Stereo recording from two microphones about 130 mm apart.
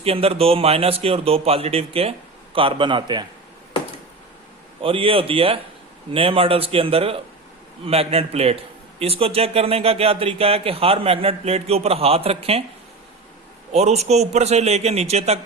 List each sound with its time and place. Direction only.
0.0 s speech: 50° right (ahead or behind)
4.8 s speech: 45° right (ahead or behind)
13.7 s a man's voice: 55° right (ahead or behind)